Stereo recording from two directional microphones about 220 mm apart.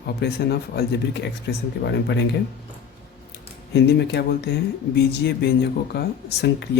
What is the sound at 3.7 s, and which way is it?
Speech, 50° left (ahead or behind).